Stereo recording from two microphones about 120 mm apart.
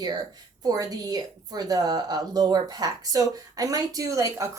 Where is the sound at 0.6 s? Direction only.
30° right (ahead or behind).